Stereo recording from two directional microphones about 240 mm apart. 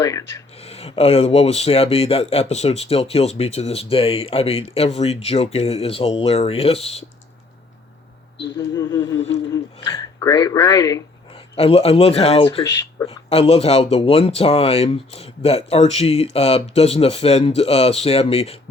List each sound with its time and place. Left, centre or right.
0.0 s speech: centre
0.5 s speech: left
8.5 s speech: centre